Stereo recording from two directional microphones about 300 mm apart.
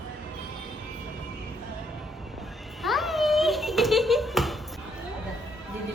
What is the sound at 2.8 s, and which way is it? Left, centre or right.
Bouncing, centre.